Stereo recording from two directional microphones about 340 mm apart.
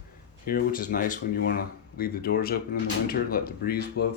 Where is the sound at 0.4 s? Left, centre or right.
Left.